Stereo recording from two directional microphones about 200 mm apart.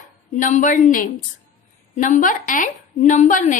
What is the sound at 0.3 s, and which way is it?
A woman's voice, 40° left (ahead or behind).